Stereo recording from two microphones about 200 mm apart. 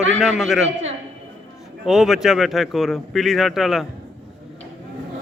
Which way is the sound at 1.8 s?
Centre (ahead or behind).